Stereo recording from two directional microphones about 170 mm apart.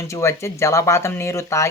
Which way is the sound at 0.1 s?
15° left (ahead or behind).